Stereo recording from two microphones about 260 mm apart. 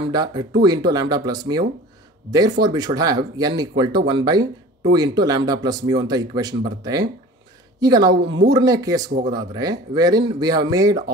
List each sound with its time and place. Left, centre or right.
0.1 s speech: centre
8.2 s speech: right
8.5 s speech: centre